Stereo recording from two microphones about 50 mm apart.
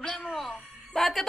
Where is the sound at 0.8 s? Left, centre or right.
Centre.